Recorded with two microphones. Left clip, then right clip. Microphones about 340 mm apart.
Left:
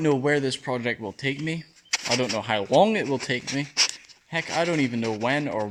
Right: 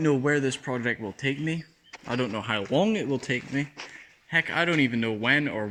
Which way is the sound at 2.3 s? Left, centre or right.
Centre.